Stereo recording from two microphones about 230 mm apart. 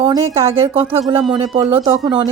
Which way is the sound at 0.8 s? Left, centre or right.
Right.